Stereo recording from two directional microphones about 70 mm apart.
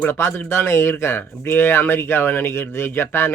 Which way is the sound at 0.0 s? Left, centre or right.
Left.